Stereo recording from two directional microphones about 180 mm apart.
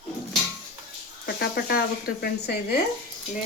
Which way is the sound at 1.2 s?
60° left (ahead or behind).